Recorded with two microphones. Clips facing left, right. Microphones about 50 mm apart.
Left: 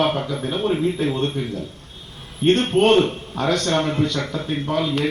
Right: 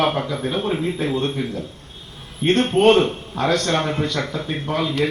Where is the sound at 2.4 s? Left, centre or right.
Right.